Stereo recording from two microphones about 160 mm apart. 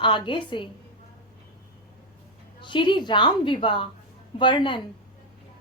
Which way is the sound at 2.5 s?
30° left (ahead or behind).